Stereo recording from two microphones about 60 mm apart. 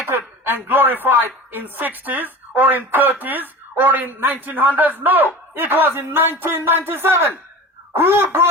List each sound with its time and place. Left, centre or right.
0.1 s a man's voice: right